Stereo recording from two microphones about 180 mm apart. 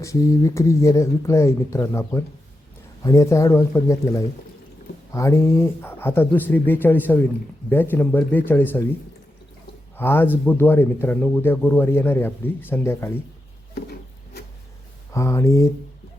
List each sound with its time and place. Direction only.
0.0 s speech: 15° left (ahead or behind)
10.0 s speech: 10° left (ahead or behind)
13.7 s a sound: 60° left (ahead or behind)
15.1 s speech: 15° left (ahead or behind)